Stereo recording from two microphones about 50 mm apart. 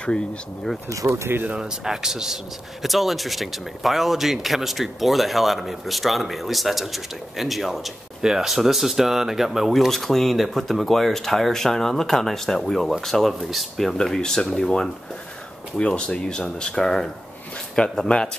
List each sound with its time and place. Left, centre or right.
0.0 s speech: centre
0.8 s speech: right
1.5 s speech: centre
13.9 s speech: centre